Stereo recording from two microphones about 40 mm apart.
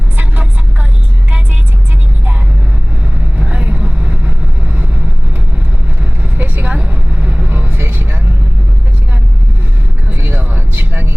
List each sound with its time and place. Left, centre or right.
0.2 s vehicle: right
3.4 s vehicle: right
6.0 s vehicle: right
7.8 s vehicle: right
10.5 s vehicle: right